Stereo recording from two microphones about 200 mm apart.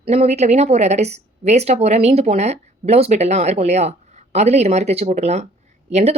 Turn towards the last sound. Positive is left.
turn(degrees=-35)  # may be behind; listen again after turning